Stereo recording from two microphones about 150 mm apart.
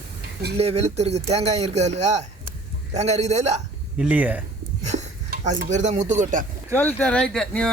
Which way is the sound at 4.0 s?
10° right (ahead or behind).